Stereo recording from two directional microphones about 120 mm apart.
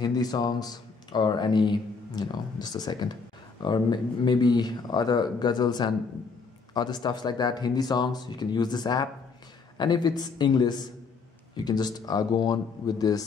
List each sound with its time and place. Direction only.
0.0 s speech: 35° left (ahead or behind)